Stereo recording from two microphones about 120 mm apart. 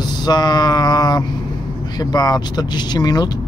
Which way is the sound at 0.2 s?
35° left (ahead or behind).